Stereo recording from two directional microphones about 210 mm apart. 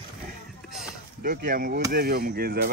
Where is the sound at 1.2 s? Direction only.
45° right (ahead or behind).